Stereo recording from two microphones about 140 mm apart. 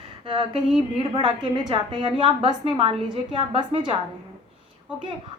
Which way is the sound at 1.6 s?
35° right (ahead or behind).